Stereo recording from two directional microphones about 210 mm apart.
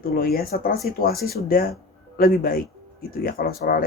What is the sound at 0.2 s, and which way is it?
Speech, 45° left (ahead or behind).